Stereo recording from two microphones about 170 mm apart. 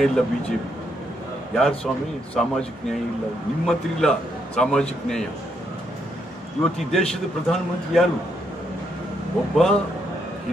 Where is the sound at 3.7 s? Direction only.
5° left (ahead or behind).